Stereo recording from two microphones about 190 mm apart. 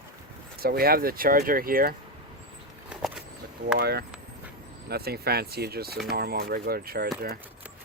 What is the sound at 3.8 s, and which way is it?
Speech, 55° right (ahead or behind).